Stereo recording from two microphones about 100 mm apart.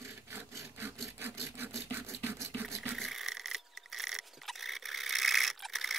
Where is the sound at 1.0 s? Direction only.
25° right (ahead or behind).